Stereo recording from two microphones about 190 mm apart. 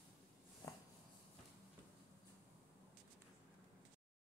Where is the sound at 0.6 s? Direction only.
15° left (ahead or behind).